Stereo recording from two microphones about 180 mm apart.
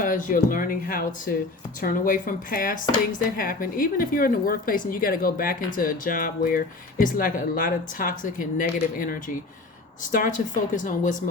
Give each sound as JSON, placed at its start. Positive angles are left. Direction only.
{"t": 0.0, "sound": "speech", "side_deg": 50}